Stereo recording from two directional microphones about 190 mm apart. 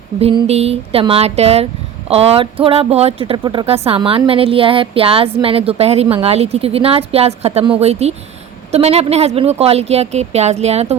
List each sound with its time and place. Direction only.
0.2 s speech: 30° right (ahead or behind)